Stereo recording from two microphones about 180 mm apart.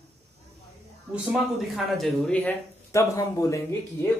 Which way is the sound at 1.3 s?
Centre (ahead or behind).